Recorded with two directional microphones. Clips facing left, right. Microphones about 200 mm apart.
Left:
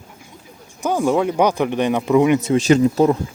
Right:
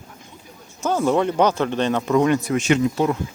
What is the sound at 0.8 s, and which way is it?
Speech, 15° left (ahead or behind).